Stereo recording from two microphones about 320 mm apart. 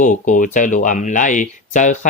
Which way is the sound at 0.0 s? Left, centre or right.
Left.